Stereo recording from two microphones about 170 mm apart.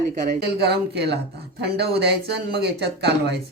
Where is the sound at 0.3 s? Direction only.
75° right (ahead or behind).